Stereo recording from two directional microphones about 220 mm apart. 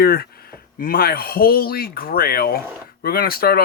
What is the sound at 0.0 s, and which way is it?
Speech, 45° left (ahead or behind).